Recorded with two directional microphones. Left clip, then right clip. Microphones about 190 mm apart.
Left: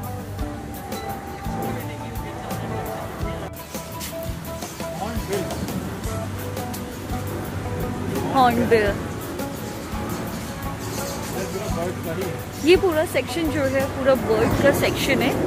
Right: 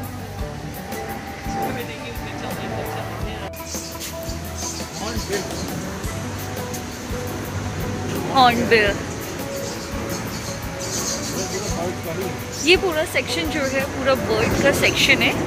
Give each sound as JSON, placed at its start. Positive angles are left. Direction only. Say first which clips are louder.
{"t": 8.4, "sound": "speech", "louder": "right 3 dB", "side_deg": 20}
{"t": 12.6, "sound": "speech", "louder": "even", "side_deg": 35}